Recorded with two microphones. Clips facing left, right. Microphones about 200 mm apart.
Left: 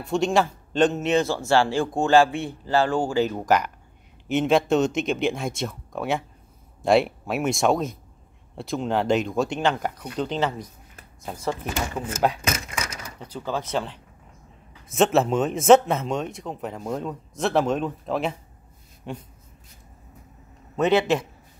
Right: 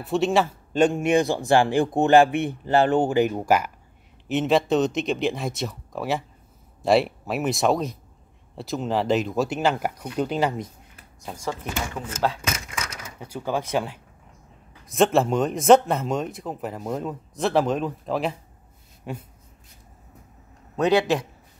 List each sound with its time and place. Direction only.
0.0 s speech: 5° right (ahead or behind)
12.1 s speech: 15° left (ahead or behind)
13.2 s speech: 10° right (ahead or behind)
14.9 s speech: centre (ahead or behind)
20.7 s speech: centre (ahead or behind)